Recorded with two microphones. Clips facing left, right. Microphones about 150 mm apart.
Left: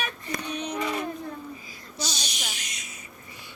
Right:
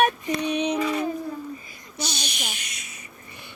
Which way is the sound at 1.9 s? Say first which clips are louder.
Right 3 dB; 60° right (ahead or behind).